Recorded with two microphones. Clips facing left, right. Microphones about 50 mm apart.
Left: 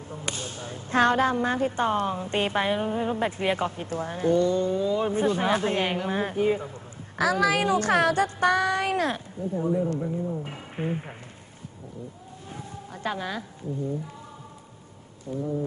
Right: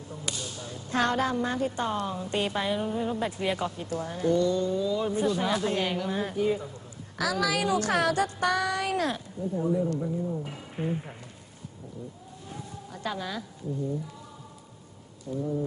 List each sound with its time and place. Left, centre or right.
0.1 s speech: left
12.4 s a sound: left
15.3 s speech: left